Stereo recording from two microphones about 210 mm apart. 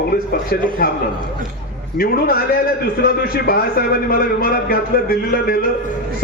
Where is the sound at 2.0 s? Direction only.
45° left (ahead or behind).